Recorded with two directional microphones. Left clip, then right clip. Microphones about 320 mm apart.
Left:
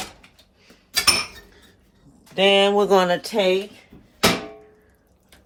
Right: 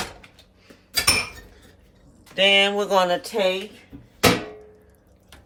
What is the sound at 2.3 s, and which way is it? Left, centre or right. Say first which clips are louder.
Speech: left 1 dB; centre.